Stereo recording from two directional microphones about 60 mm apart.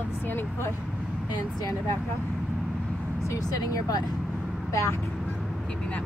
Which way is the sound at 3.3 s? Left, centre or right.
Left.